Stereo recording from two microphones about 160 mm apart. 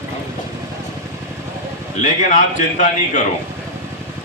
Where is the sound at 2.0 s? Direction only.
50° left (ahead or behind).